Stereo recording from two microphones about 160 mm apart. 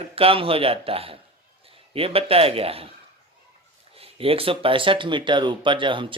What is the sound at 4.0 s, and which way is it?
Speech, 35° right (ahead or behind).